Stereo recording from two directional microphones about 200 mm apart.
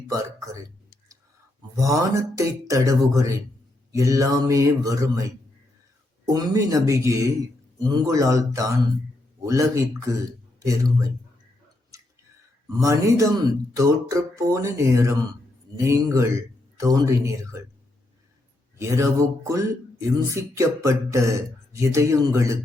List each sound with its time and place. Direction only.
0.1 s speech: 15° right (ahead or behind)
1.7 s speech: 15° right (ahead or behind)
6.2 s speech: 15° right (ahead or behind)
12.8 s speech: 15° right (ahead or behind)
18.8 s speech: 15° right (ahead or behind)